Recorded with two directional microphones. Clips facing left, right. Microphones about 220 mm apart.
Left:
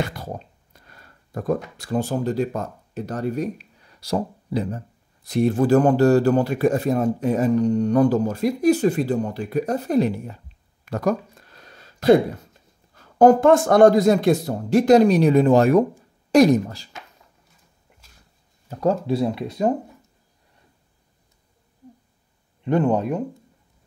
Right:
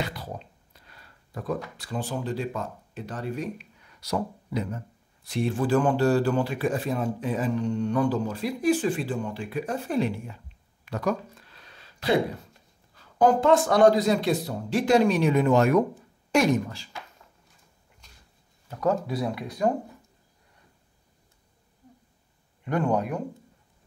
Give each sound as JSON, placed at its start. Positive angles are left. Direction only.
{"t": 0.0, "sound": "a sound", "side_deg": 45}
{"t": 1.8, "sound": "speech", "side_deg": 45}
{"t": 10.9, "sound": "a sound", "side_deg": 45}
{"t": 12.9, "sound": "speech", "side_deg": 50}
{"t": 18.7, "sound": "speech", "side_deg": 30}
{"t": 22.7, "sound": "speech", "side_deg": 25}